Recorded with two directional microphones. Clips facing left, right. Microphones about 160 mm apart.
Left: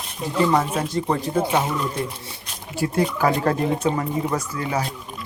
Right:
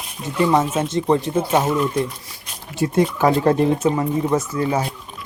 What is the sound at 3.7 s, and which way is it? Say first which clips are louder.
Speech: right 3 dB; 5° right (ahead or behind).